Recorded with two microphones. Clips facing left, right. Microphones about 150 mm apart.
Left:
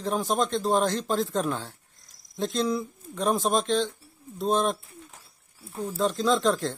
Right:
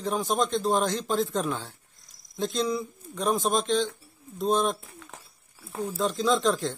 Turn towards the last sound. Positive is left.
turn(degrees=0)  # may be behind; listen again after turning